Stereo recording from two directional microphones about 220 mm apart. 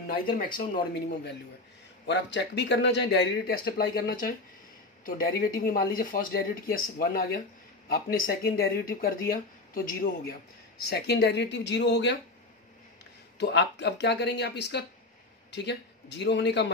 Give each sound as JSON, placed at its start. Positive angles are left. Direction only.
{"t": 0.0, "sound": "speech", "side_deg": 40}
{"t": 2.0, "sound": "speech", "side_deg": 50}
{"t": 13.4, "sound": "a man's voice", "side_deg": 50}